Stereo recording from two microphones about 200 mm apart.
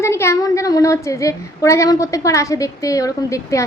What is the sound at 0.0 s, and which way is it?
A woman's voice, 15° left (ahead or behind).